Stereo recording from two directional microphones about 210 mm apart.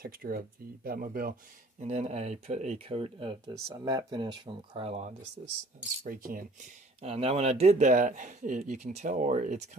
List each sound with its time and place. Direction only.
0.0 s speech: 45° right (ahead or behind)
1.8 s speech: 35° right (ahead or behind)
7.0 s speech: 30° right (ahead or behind)